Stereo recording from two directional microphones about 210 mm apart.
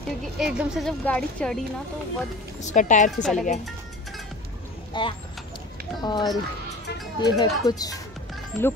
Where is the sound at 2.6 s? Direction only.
35° left (ahead or behind).